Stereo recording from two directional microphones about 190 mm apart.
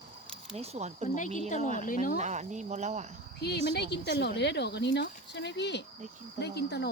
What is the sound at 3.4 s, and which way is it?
Speech, 60° left (ahead or behind).